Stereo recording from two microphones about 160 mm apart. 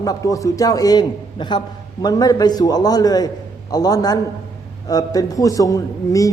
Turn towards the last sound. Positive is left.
turn(degrees=20)  # may be behind; listen again after turning